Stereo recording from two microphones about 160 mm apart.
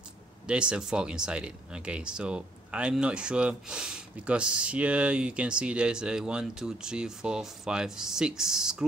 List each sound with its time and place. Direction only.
0.5 s speech: 5° right (ahead or behind)